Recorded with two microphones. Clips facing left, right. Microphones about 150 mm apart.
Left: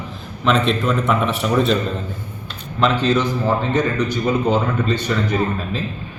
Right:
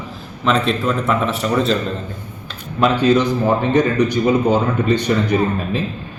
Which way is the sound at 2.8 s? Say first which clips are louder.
Right 3 dB; 15° right (ahead or behind).